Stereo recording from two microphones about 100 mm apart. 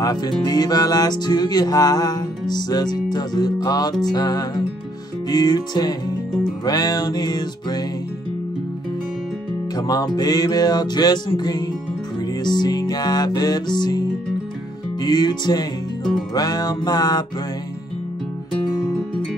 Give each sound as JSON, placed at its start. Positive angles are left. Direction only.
{"t": 0.0, "sound": "music", "side_deg": 40}
{"t": 9.8, "sound": "music", "side_deg": 40}